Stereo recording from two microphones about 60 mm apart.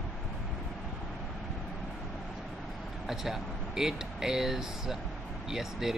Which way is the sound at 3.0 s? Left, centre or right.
Centre.